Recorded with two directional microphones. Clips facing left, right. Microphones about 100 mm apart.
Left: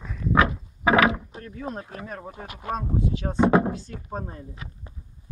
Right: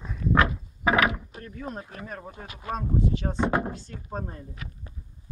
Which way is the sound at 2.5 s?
45° left (ahead or behind).